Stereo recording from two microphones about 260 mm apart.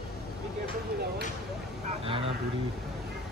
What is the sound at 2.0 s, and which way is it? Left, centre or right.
Vehicle, right.